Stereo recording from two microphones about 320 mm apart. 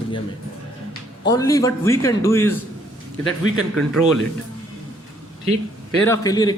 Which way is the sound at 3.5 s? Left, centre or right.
Centre.